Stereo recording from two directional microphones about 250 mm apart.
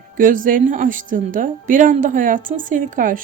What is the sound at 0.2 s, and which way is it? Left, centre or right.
Speech, right.